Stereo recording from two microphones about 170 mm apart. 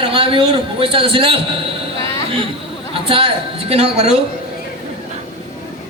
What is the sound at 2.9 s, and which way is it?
A man's voice, 30° right (ahead or behind).